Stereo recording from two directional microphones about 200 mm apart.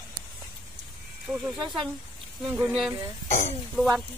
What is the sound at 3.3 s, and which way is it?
Speech, 35° left (ahead or behind).